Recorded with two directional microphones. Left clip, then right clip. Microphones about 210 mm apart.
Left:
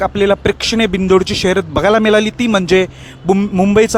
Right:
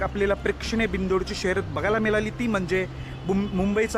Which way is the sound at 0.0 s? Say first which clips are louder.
Left 11 dB; 45° left (ahead or behind).